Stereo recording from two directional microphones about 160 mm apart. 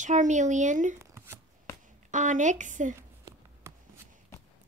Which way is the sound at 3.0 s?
15° right (ahead or behind).